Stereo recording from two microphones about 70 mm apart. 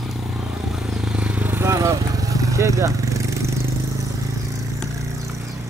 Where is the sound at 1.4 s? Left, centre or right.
Right.